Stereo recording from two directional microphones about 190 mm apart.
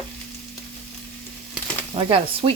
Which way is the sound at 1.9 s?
30° right (ahead or behind).